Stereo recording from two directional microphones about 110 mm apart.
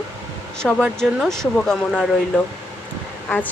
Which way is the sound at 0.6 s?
Centre (ahead or behind).